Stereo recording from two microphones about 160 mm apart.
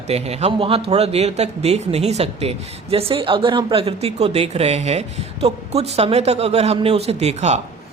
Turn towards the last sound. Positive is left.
turn(degrees=-45)  # may be behind; listen again after turning